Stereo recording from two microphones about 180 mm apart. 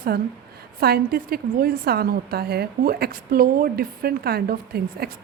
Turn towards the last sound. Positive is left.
turn(degrees=-60)  # may be behind; listen again after turning